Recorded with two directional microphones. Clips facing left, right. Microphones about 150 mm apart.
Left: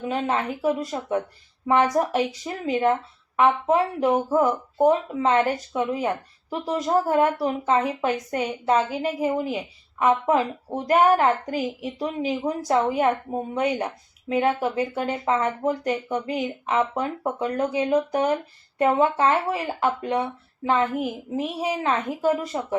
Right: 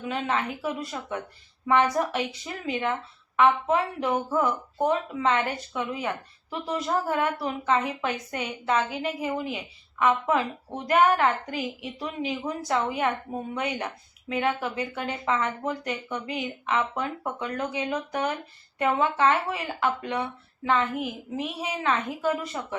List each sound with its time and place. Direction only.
0.0 s speech: 35° left (ahead or behind)